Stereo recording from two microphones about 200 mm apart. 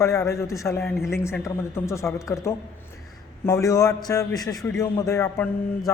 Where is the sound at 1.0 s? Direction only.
15° left (ahead or behind).